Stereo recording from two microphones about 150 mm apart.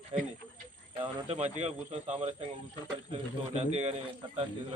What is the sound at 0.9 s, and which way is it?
A man's voice, 40° right (ahead or behind).